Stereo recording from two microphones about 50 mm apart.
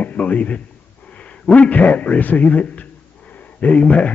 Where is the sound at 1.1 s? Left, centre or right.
Left.